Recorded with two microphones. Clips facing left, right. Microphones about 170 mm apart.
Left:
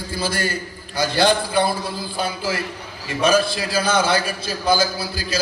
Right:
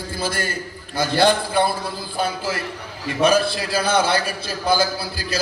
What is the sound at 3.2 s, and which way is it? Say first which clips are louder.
A man's voice: even; 60° right (ahead or behind).